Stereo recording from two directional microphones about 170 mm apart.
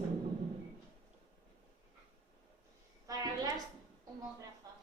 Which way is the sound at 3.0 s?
20° right (ahead or behind).